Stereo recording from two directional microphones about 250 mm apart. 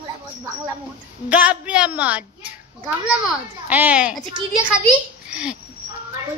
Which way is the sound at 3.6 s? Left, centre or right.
Centre.